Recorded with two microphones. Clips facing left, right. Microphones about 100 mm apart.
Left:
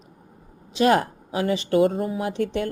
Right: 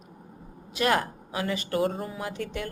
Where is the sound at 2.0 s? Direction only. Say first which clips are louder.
Left 8 dB; 30° left (ahead or behind).